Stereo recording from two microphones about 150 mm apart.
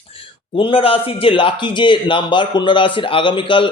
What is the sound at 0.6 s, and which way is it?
Speech, 35° left (ahead or behind).